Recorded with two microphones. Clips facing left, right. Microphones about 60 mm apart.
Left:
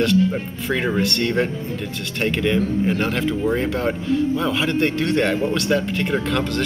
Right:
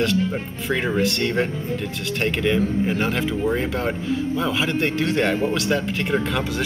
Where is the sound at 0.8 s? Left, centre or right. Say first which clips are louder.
Even; centre.